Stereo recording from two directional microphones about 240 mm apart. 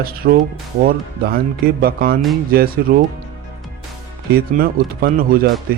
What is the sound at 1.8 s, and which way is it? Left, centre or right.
Speech, right.